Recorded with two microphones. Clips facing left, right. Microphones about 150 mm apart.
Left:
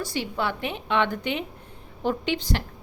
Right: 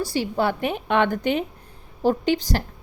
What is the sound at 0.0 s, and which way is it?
A woman's voice, 35° right (ahead or behind).